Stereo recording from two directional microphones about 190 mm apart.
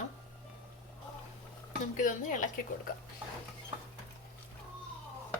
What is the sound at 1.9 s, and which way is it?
Speech, 40° left (ahead or behind).